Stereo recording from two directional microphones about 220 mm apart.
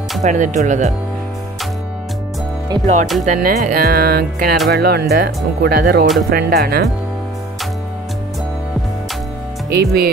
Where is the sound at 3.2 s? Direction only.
40° right (ahead or behind).